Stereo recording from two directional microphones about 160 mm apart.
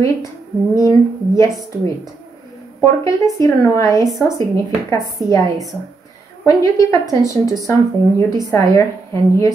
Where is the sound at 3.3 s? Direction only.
20° left (ahead or behind).